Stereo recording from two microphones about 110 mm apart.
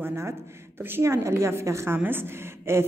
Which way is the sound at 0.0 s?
25° right (ahead or behind).